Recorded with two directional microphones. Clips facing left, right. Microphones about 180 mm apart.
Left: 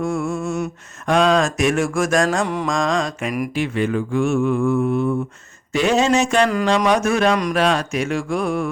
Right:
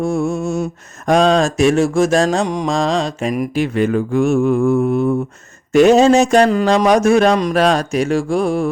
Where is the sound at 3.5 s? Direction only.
40° right (ahead or behind).